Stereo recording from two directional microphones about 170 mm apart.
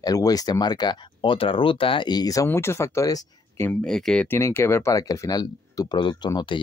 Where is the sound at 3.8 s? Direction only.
5° left (ahead or behind).